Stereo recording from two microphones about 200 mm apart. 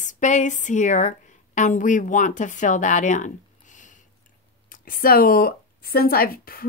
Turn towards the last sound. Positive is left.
turn(degrees=45)  # may be behind; listen again after turning